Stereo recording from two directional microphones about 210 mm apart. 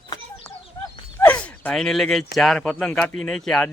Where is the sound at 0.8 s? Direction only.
20° left (ahead or behind).